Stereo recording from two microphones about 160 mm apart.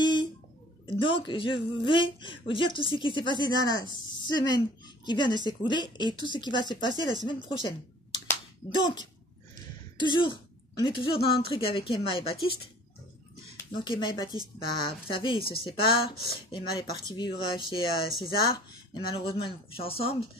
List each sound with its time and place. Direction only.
0.0 s a sound: 30° left (ahead or behind)
0.8 s a woman's voice: 30° left (ahead or behind)
8.7 s a woman's voice: 30° left (ahead or behind)
13.6 s a woman's voice: 30° left (ahead or behind)